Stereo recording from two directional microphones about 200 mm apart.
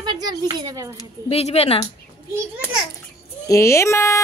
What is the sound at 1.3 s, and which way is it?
Speech, 30° left (ahead or behind).